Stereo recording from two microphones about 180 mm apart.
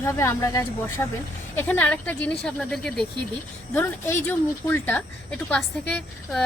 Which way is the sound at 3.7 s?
15° left (ahead or behind).